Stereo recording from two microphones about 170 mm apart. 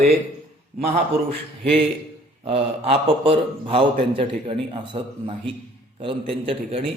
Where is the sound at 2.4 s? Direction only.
35° right (ahead or behind).